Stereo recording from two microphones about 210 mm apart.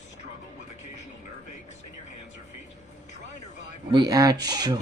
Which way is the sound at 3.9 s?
20° right (ahead or behind).